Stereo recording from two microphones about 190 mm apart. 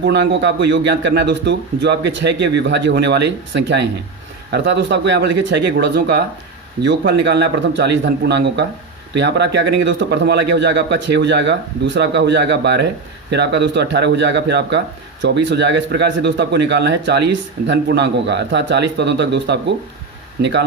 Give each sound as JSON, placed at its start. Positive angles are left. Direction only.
{"t": 0.0, "sound": "a man's voice", "side_deg": -65}